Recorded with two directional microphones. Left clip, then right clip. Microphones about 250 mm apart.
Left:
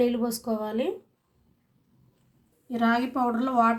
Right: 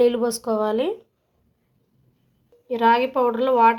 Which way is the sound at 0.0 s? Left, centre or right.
Centre.